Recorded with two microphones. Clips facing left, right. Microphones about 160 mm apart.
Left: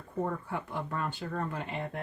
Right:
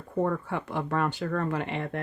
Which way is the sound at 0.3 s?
75° right (ahead or behind).